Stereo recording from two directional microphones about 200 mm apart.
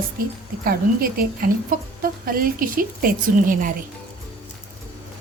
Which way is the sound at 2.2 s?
45° right (ahead or behind).